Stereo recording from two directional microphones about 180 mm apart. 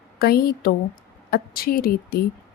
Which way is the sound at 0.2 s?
60° left (ahead or behind).